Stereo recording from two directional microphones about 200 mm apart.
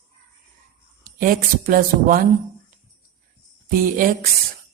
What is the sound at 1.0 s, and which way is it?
Speech, 45° right (ahead or behind).